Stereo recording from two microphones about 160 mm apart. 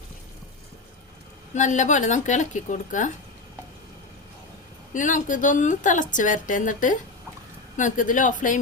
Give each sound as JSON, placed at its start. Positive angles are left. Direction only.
{"t": 1.5, "sound": "a woman's voice", "side_deg": 50}
{"t": 4.9, "sound": "a woman's voice", "side_deg": 55}